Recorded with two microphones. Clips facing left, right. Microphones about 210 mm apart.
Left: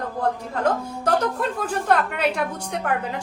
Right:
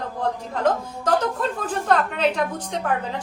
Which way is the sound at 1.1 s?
10° left (ahead or behind).